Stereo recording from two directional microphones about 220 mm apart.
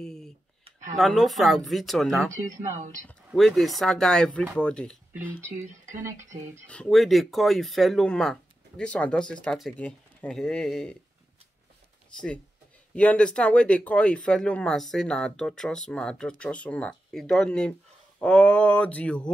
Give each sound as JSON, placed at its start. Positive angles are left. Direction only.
{"t": 0.0, "sound": "a sound", "side_deg": 0}
{"t": 0.7, "sound": "a sound", "side_deg": -35}
{"t": 0.9, "sound": "speech", "side_deg": 0}
{"t": 2.4, "sound": "speech", "side_deg": -35}
{"t": 3.3, "sound": "speech", "side_deg": 0}
{"t": 5.7, "sound": "speech", "side_deg": -35}
{"t": 6.7, "sound": "speech", "side_deg": 5}
{"t": 12.9, "sound": "speech", "side_deg": 5}